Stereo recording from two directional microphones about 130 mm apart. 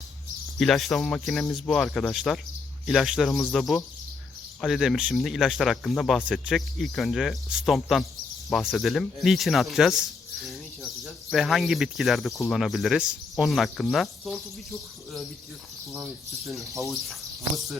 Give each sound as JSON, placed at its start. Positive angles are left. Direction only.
{"t": 0.6, "sound": "speech", "side_deg": 0}
{"t": 15.9, "sound": "speech", "side_deg": -25}
{"t": 16.8, "sound": "speech", "side_deg": 0}